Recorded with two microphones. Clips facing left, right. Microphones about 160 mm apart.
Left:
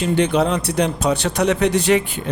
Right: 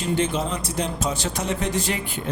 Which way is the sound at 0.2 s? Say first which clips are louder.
Left 7 dB; 70° left (ahead or behind).